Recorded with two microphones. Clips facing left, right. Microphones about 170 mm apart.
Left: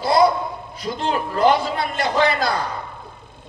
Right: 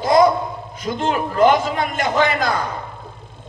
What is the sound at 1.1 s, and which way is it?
A man's voice, 35° left (ahead or behind).